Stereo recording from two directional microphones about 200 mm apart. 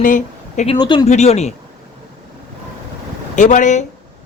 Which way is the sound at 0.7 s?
20° left (ahead or behind).